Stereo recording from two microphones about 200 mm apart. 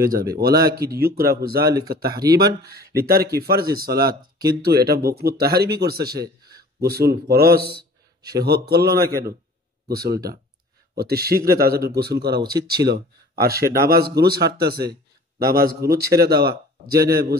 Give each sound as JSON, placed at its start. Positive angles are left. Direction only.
{"t": 0.0, "sound": "speech", "side_deg": -50}
{"t": 1.7, "sound": "speech", "side_deg": -20}
{"t": 2.3, "sound": "speech", "side_deg": -55}
{"t": 6.1, "sound": "a sound", "side_deg": -20}
{"t": 6.8, "sound": "a man's voice", "side_deg": -50}